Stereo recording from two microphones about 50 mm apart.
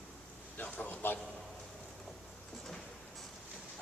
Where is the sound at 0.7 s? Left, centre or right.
Left.